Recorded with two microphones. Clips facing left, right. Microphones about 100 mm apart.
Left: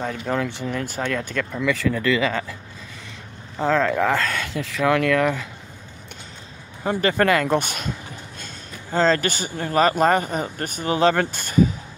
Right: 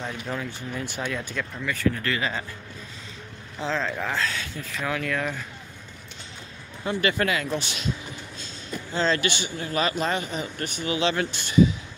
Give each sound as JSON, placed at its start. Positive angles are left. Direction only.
{"t": 0.3, "sound": "speech", "side_deg": 90}
{"t": 3.5, "sound": "speech", "side_deg": 55}
{"t": 4.2, "sound": "speech", "side_deg": 60}
{"t": 6.8, "sound": "speech", "side_deg": 40}
{"t": 7.2, "sound": "speech", "side_deg": 55}
{"t": 8.9, "sound": "speech", "side_deg": 40}